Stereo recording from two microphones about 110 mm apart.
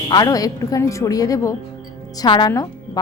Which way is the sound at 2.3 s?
45° left (ahead or behind).